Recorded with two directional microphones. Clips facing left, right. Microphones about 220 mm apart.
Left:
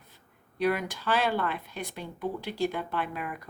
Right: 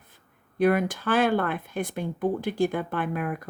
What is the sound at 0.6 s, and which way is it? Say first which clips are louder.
Speech: right 6 dB; 50° right (ahead or behind).